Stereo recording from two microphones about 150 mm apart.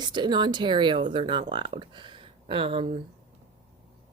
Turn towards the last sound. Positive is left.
turn(degrees=-40)  # may be behind; listen again after turning